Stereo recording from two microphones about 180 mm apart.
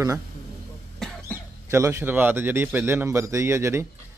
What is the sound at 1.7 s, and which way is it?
A man's voice, 15° right (ahead or behind).